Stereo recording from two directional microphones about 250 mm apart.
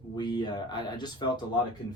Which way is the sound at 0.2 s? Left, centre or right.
Centre.